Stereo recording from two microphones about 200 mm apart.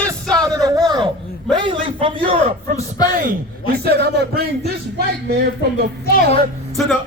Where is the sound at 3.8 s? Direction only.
50° right (ahead or behind).